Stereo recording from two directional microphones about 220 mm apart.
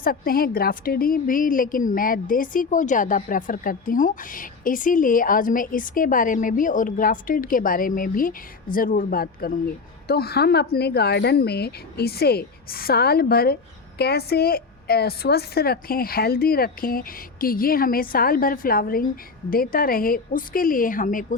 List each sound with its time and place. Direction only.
0.0 s a woman's voice: 40° left (ahead or behind)